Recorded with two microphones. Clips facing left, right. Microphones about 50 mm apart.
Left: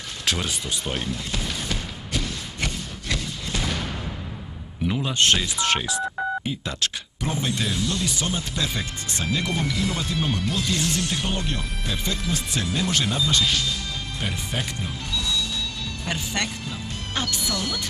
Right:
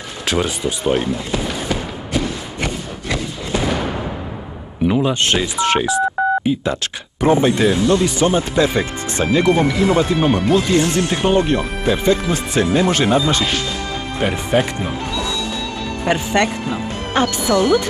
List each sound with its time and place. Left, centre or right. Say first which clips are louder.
0.3 s artillery fire: right 8 dB; centre
4.8 s a sound: right 10 dB; right
5.2 s speech: right 4 dB; centre
7.2 s speech: right 14 dB; right